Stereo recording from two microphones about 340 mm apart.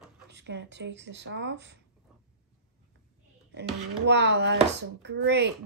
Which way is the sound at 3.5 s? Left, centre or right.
Right.